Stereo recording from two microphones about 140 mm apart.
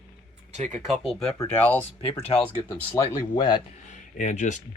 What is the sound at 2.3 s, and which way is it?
Speech, 40° left (ahead or behind).